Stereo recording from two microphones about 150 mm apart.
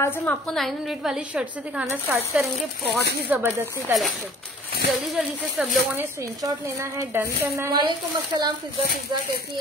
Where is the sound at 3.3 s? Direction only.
15° right (ahead or behind).